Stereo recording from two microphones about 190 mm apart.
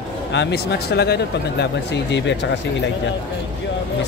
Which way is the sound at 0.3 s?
65° left (ahead or behind).